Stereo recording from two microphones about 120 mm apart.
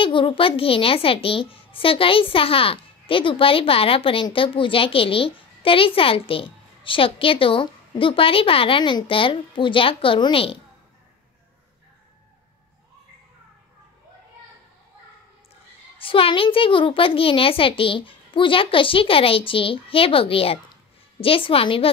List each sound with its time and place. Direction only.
0.0 s a child's voice: 45° left (ahead or behind)
16.0 s a child's voice: 50° left (ahead or behind)